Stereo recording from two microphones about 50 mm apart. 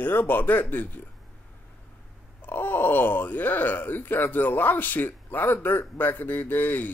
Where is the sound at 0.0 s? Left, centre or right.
Left.